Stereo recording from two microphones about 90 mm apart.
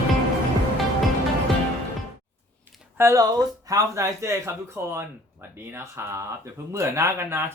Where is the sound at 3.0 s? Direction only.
30° right (ahead or behind).